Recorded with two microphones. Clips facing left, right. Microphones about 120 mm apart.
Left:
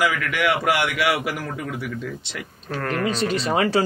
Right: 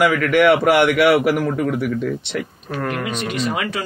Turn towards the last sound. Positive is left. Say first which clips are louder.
# left 2 dB
turn(degrees=30)  # may be behind; listen again after turning